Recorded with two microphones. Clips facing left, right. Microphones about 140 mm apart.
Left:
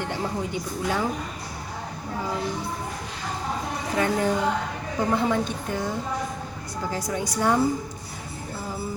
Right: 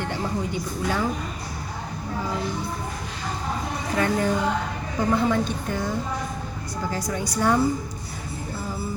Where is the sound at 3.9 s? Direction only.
15° left (ahead or behind).